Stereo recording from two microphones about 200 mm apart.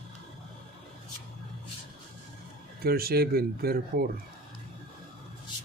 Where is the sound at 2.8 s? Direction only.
50° right (ahead or behind).